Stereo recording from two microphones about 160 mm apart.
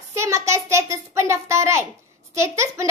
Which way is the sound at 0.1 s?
20° right (ahead or behind).